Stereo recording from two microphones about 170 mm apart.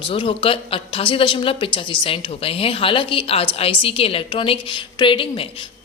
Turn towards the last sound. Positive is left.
turn(degrees=30)  # may be behind; listen again after turning